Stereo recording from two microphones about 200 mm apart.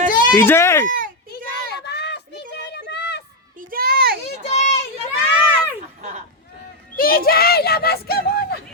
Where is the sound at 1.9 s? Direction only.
55° left (ahead or behind).